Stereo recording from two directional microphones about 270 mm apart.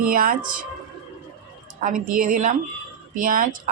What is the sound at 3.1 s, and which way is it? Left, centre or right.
Speech, right.